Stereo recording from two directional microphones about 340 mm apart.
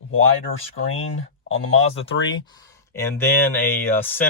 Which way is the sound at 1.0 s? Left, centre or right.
Left.